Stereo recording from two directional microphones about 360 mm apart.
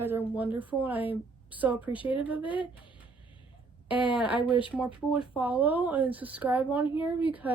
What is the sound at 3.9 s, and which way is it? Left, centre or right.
A woman's voice, centre.